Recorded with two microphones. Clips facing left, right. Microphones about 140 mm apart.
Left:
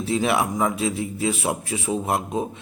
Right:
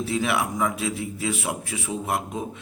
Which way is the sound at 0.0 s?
30° left (ahead or behind).